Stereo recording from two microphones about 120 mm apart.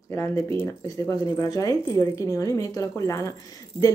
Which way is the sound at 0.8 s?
30° left (ahead or behind).